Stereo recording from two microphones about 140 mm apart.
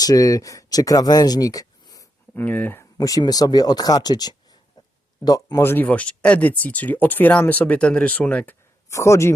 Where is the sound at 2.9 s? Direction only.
25° left (ahead or behind); by 8.5 s 10° left (ahead or behind).